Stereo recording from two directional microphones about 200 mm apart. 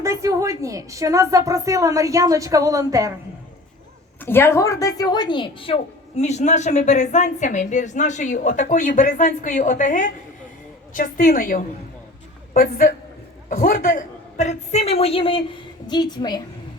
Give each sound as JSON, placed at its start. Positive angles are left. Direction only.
{"t": 0.0, "sound": "a woman's voice", "side_deg": -15}
{"t": 4.2, "sound": "a woman's voice", "side_deg": 10}